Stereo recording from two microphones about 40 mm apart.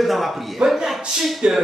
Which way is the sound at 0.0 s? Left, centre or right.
Centre.